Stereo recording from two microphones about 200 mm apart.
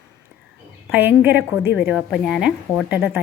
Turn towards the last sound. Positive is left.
turn(degrees=-10)  # may be behind; listen again after turning